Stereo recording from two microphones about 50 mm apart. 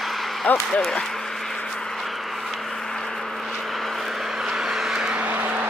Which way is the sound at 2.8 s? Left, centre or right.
Centre.